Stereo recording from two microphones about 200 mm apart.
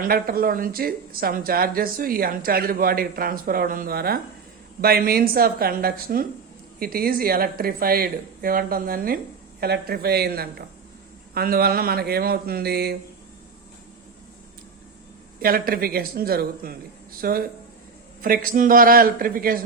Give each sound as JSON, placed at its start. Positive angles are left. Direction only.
{"t": 0.0, "sound": "a woman's voice", "side_deg": -45}
{"t": 15.4, "sound": "a woman's voice", "side_deg": -45}